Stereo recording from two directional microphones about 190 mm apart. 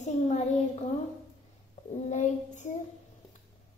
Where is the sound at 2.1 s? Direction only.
40° left (ahead or behind).